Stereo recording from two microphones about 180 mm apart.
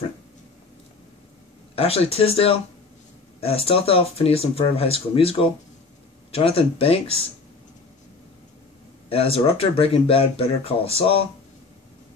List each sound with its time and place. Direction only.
1.8 s speech: 35° left (ahead or behind)
9.1 s speech: 30° left (ahead or behind)